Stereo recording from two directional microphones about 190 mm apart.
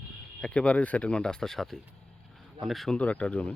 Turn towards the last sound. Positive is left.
turn(degrees=5)  # may be behind; listen again after turning